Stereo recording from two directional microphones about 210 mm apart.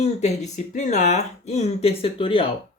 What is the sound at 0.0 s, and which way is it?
Speech, 30° left (ahead or behind).